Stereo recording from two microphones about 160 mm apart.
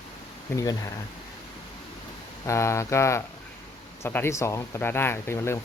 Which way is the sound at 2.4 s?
15° left (ahead or behind).